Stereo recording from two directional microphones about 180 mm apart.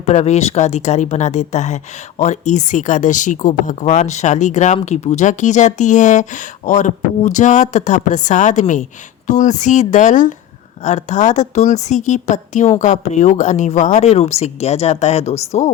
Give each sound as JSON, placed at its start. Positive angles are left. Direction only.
{"t": 0.0, "sound": "speech", "side_deg": 40}